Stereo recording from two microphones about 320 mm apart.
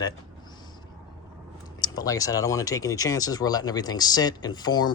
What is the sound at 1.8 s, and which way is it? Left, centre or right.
Speech, centre.